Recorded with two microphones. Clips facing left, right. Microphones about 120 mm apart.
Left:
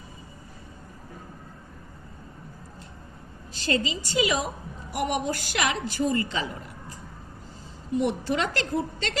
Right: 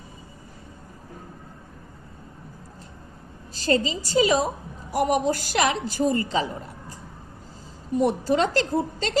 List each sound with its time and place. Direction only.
3.5 s a woman's voice: 35° right (ahead or behind)
7.9 s a woman's voice: 40° right (ahead or behind)